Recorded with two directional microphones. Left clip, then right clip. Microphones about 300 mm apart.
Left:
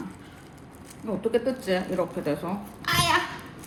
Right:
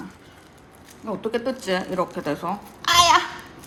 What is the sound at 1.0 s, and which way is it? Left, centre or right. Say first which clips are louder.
Speech: even; right.